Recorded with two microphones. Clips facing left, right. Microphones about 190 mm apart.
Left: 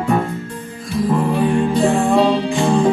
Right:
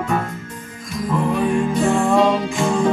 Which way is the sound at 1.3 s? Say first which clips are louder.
Left 2 dB; 30° left (ahead or behind).